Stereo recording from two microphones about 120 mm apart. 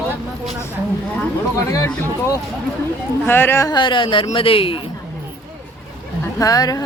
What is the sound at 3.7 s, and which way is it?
Speech, 40° left (ahead or behind).